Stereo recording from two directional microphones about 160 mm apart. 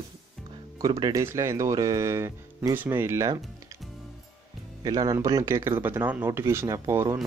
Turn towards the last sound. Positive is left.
turn(degrees=-15)  # may be behind; listen again after turning